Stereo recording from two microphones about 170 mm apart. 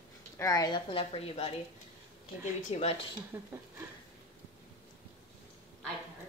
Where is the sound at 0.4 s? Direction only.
20° left (ahead or behind).